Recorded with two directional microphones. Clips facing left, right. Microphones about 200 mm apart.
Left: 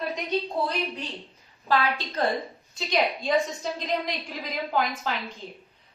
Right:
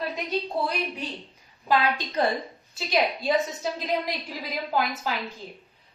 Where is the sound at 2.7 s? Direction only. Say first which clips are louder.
Even; 5° right (ahead or behind).